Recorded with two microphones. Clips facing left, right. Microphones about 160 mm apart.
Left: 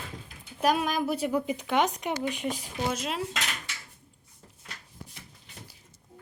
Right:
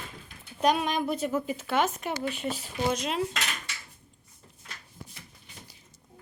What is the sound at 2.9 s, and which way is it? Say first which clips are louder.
Dishes: right 3 dB; 5° left (ahead or behind).